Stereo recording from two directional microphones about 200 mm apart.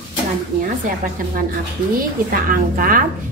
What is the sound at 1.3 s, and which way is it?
A woman's voice, 45° right (ahead or behind).